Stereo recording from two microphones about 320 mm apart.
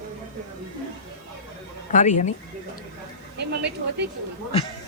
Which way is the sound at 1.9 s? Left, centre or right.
Left.